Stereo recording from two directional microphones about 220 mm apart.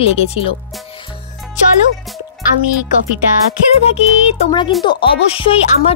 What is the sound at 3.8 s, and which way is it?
Speech, 30° left (ahead or behind).